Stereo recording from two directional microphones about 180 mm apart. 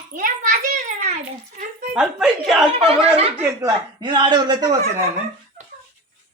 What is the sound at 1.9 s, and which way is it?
Speech, 5° right (ahead or behind).